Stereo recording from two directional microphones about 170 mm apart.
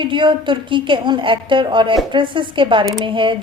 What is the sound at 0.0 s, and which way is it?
Speech, 30° right (ahead or behind).